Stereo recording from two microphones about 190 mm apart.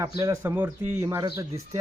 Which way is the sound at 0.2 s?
15° right (ahead or behind).